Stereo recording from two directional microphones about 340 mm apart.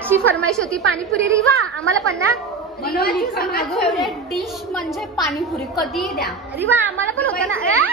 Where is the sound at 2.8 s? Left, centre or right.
Left.